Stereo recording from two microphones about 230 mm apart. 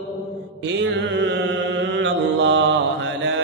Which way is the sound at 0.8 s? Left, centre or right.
Right.